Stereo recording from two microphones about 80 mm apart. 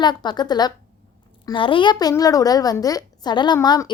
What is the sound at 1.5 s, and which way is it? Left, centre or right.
Speech, left.